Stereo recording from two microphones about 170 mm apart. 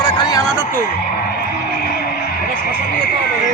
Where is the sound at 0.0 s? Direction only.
25° left (ahead or behind).